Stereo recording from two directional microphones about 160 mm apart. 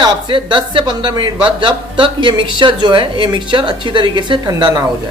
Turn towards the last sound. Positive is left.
turn(degrees=-25)  # may be behind; listen again after turning